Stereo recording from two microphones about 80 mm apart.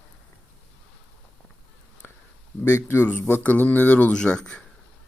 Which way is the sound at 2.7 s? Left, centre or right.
Left.